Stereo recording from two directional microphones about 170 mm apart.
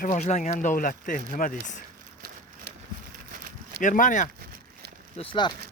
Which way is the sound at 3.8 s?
50° left (ahead or behind).